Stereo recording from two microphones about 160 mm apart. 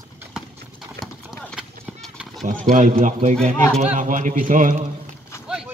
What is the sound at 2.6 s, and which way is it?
A man's voice, 50° right (ahead or behind).